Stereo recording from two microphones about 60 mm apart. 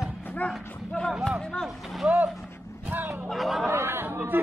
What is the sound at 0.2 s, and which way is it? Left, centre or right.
Livestock, left.